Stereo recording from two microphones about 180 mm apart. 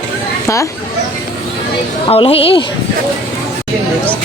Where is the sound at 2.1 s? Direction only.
30° left (ahead or behind).